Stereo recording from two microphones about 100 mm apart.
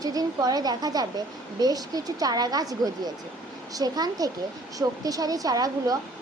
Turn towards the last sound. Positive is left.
turn(degrees=-40)  # may be behind; listen again after turning